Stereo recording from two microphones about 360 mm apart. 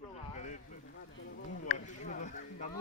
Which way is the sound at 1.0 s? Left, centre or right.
Left.